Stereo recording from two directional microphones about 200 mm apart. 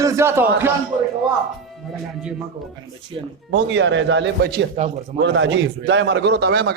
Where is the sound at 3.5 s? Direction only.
65° right (ahead or behind).